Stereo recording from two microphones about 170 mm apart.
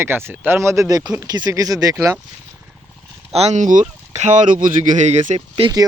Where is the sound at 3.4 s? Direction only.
45° right (ahead or behind).